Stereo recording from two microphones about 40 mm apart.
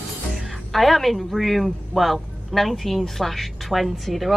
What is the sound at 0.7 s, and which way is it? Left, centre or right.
A woman's voice, centre.